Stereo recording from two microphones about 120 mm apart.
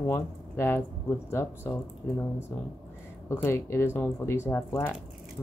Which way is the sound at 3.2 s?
25° left (ahead or behind).